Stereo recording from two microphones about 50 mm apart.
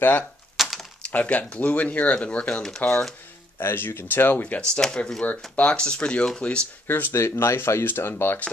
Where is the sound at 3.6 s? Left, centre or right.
Left.